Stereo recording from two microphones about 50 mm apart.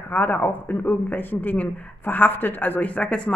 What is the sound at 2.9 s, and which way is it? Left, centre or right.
Speech, left.